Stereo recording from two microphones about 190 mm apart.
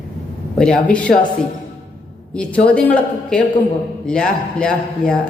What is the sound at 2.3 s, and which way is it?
A man's voice, 5° left (ahead or behind).